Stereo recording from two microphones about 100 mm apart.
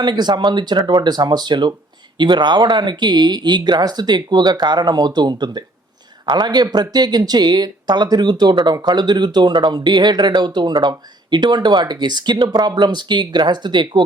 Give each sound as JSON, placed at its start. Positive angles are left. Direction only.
{"t": 0.0, "sound": "speech", "side_deg": -45}